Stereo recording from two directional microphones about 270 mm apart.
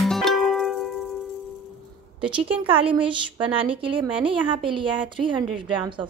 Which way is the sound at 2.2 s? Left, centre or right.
Centre.